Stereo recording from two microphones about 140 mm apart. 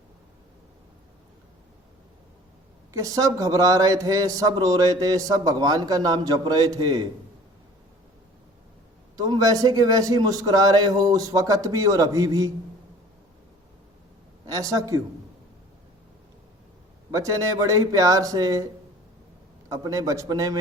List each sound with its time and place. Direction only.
2.9 s a man's voice: 25° right (ahead or behind)
9.1 s a man's voice: 25° right (ahead or behind)
14.4 s a man's voice: 25° right (ahead or behind)
17.1 s a man's voice: 25° right (ahead or behind)